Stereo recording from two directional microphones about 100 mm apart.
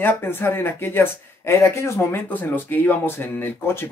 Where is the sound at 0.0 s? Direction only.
25° left (ahead or behind).